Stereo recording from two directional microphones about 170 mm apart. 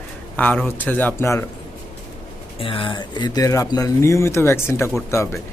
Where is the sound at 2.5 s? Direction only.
30° left (ahead or behind).